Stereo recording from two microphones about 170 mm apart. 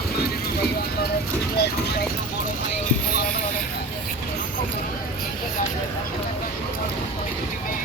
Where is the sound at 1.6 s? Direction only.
85° left.